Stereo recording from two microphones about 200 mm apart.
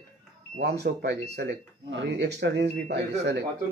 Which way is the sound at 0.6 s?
55° right (ahead or behind).